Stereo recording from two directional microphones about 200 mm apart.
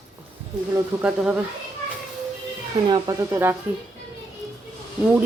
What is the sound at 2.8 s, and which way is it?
Speech, 20° right (ahead or behind).